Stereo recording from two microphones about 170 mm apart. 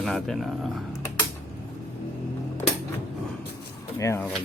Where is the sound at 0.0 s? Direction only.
Centre (ahead or behind).